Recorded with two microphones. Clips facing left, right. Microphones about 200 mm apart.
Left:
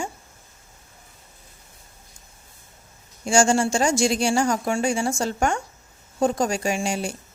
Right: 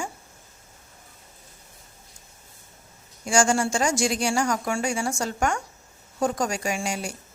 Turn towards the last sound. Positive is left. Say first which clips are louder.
# left 4 dB
turn(degrees=25)  # may be behind; listen again after turning